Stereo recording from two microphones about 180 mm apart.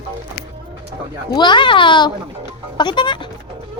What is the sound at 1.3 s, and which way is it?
Speech, 25° left (ahead or behind).